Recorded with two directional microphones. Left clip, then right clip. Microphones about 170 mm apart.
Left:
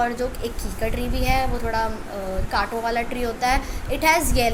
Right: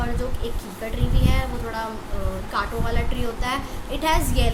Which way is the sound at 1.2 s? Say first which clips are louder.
Left 7 dB; 30° left (ahead or behind).